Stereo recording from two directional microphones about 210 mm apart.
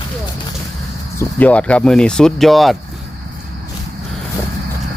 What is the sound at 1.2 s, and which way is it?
Speech, 5° left (ahead or behind).